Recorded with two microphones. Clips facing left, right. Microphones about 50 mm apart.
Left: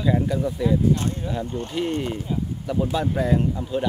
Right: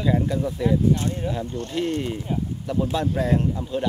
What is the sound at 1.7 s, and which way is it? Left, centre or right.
A man's voice, centre.